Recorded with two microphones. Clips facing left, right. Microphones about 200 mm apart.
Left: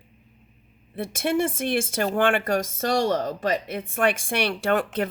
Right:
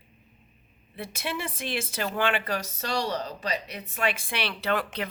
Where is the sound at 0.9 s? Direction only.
50° left (ahead or behind).